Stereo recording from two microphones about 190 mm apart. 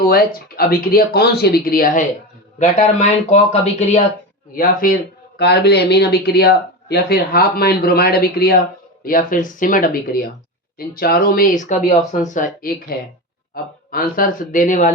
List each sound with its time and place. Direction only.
0.5 s speech: 50° left (ahead or behind)
2.6 s speech: 35° left (ahead or behind)
4.5 s speech: 50° left (ahead or behind)
5.4 s speech: 60° left (ahead or behind); by 14.9 s 40° left (ahead or behind)